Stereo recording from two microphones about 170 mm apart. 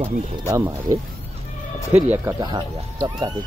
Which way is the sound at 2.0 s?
10° right (ahead or behind).